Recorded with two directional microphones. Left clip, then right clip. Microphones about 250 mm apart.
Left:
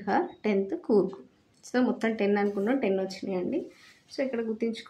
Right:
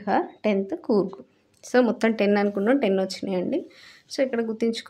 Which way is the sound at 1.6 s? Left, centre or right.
Right.